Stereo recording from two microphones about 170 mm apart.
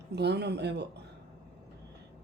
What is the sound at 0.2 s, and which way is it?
Speech, 75° right (ahead or behind).